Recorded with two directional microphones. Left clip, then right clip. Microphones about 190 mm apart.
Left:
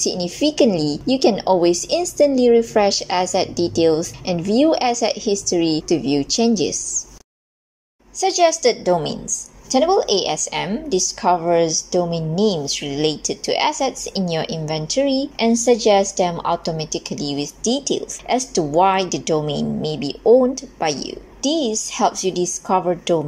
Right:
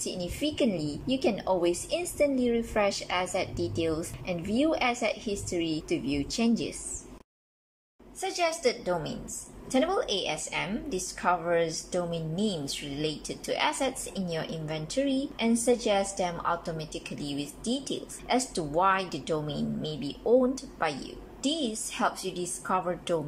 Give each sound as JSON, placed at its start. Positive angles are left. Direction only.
{"t": 0.0, "sound": "a woman's voice", "side_deg": 25}
{"t": 8.2, "sound": "a woman's voice", "side_deg": 25}